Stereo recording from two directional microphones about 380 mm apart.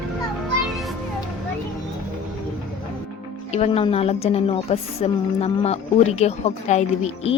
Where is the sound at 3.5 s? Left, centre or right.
Centre.